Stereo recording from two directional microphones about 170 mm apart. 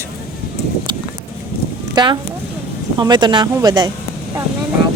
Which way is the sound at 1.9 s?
25° right (ahead or behind).